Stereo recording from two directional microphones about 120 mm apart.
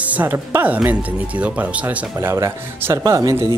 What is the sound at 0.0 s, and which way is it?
Speech, 15° right (ahead or behind).